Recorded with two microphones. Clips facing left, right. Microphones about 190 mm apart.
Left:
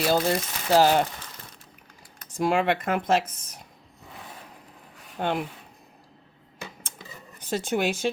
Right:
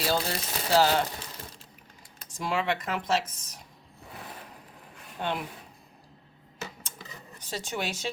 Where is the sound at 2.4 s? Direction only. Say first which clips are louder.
Left 6 dB; 50° left (ahead or behind).